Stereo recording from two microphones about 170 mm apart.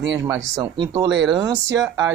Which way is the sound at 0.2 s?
20° right (ahead or behind).